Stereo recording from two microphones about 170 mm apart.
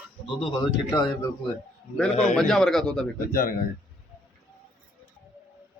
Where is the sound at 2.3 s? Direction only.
5° left (ahead or behind).